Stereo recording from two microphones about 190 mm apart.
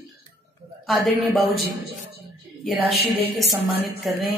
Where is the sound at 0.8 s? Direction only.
Centre (ahead or behind).